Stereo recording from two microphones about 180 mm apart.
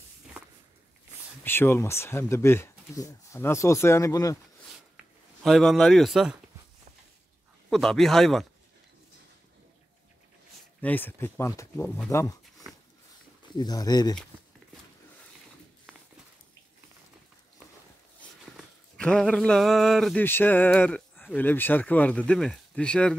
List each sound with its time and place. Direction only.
1.4 s speech: 10° left (ahead or behind)
5.4 s speech: centre (ahead or behind)
7.7 s speech: centre (ahead or behind)
10.8 s speech: 10° left (ahead or behind)
13.6 s speech: 20° left (ahead or behind)
18.6 s speech: 5° left (ahead or behind)